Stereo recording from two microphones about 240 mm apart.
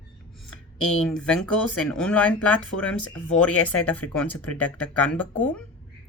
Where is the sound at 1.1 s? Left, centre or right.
Centre.